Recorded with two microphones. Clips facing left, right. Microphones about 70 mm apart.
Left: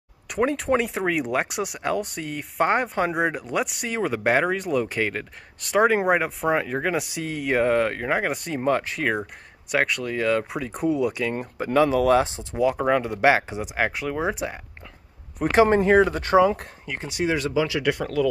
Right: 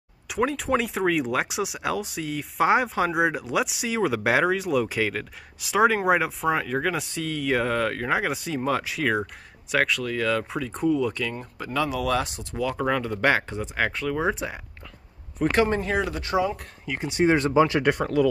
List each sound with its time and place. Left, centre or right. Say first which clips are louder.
0.4 s speech: left 2 dB; centre
6.5 s speech: left 4 dB; centre
11.5 s speech: left 8 dB; left; by 14.1 s centre
14.1 s speech: even; centre
15.5 s speech: left 6 dB; left
15.8 s speech: left 8 dB; left
17.1 s speech: right 3 dB; right
18.0 s speech: right 1 dB; centre